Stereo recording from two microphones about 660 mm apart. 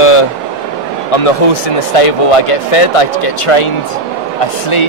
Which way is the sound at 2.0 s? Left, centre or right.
Left.